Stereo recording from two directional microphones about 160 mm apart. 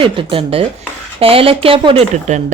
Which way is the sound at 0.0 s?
35° right (ahead or behind).